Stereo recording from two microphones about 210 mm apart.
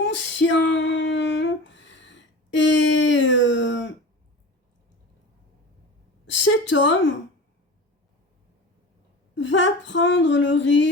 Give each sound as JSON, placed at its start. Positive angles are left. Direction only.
{"t": 0.0, "sound": "female singing", "side_deg": 60}
{"t": 6.4, "sound": "a sound", "side_deg": 60}
{"t": 9.3, "sound": "speech", "side_deg": 60}